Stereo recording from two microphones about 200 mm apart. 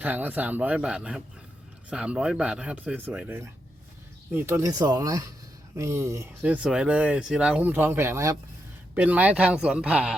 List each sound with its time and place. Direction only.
0.0 s speech: 10° right (ahead or behind)